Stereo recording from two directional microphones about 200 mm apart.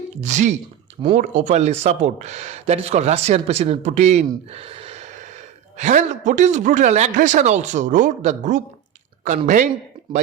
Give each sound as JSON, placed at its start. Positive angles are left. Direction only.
{"t": 0.2, "sound": "speech", "side_deg": -35}